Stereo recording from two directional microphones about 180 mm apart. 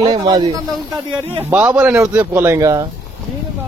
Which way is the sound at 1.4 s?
10° right (ahead or behind).